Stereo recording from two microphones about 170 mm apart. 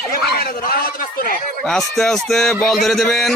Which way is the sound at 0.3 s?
60° left (ahead or behind).